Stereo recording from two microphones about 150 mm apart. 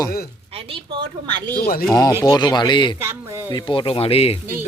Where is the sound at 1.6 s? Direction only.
90° left.